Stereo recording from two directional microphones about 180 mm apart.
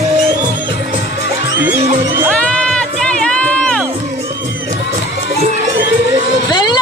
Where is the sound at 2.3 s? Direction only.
5° left (ahead or behind).